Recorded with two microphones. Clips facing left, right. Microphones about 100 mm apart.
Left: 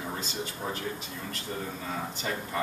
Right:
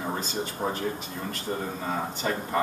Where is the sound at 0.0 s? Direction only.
45° right (ahead or behind).